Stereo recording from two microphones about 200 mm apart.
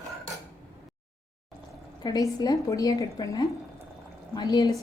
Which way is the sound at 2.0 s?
20° left (ahead or behind).